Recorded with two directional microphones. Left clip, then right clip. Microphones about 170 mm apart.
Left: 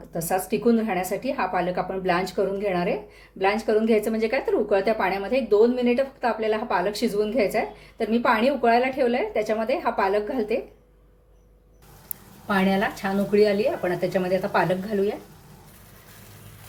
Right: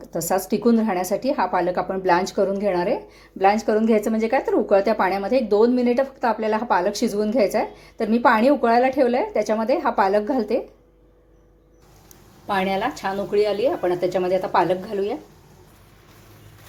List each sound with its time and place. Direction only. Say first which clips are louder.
0.1 s speech: right 3 dB; 35° right (ahead or behind)
12.5 s speech: right 1 dB; 25° right (ahead or behind)